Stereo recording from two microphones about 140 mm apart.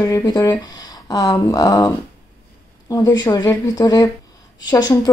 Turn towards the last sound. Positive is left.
turn(degrees=30)  # may be behind; listen again after turning